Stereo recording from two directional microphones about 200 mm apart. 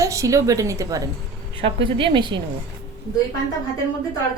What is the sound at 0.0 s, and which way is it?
A woman's voice, 15° right (ahead or behind).